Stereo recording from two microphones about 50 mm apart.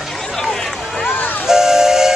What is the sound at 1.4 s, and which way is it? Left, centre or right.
Steam whistle, centre.